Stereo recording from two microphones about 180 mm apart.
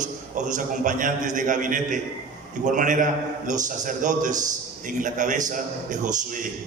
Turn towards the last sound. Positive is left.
turn(degrees=-45)  # may be behind; listen again after turning